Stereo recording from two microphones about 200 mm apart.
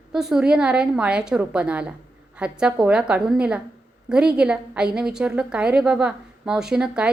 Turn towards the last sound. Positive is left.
turn(degrees=-5)  # may be behind; listen again after turning